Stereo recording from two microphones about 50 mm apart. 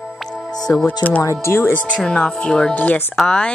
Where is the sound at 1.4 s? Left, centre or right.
Left.